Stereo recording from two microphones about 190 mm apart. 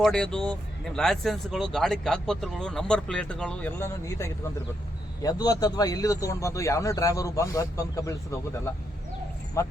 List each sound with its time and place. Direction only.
0.0 s a man's voice: 5° left (ahead or behind)
9.6 s a man's voice: 15° left (ahead or behind)